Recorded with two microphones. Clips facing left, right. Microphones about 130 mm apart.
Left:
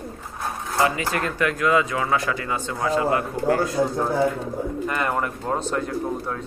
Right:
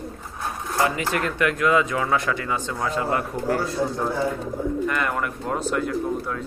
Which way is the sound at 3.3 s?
5° right (ahead or behind).